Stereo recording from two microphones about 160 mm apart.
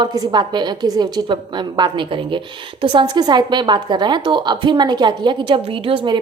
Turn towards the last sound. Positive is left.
turn(degrees=-30)  # may be behind; listen again after turning